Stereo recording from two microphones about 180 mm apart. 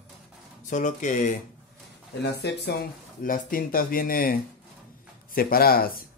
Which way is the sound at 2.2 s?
65° left (ahead or behind).